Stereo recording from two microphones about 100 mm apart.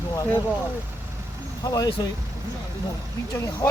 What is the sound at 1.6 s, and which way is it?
Speech, 40° left (ahead or behind).